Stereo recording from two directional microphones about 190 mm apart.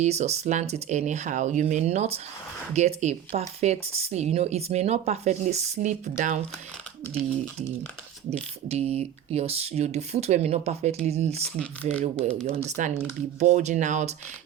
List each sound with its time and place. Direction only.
0.0 s speech: 35° right (ahead or behind)
8.6 s speech: 30° right (ahead or behind)
11.6 s speech: 5° left (ahead or behind)
12.5 s speech: 40° right (ahead or behind)